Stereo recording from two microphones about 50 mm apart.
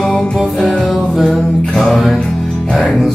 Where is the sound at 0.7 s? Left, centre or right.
Centre.